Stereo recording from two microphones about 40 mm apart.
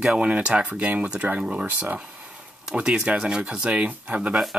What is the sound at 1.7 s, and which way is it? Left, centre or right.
Speech, right.